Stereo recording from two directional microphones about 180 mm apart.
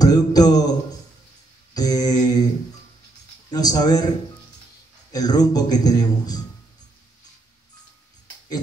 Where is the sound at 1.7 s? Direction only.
20° left (ahead or behind).